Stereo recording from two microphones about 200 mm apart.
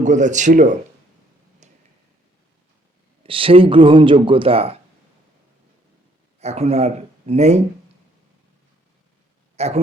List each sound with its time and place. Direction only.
0.0 s speech: 40° right (ahead or behind)
1.6 s tick-tock: 35° right (ahead or behind)
3.2 s speech: 25° right (ahead or behind)
6.4 s speech: 30° right (ahead or behind)
9.6 s a man's voice: 30° right (ahead or behind)